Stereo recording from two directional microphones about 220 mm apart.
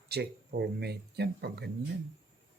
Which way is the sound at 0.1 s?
50° right (ahead or behind).